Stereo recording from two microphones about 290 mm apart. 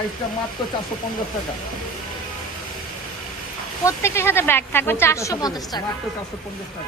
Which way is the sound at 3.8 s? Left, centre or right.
Centre.